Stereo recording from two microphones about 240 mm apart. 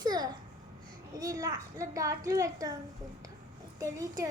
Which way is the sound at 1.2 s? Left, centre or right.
Centre.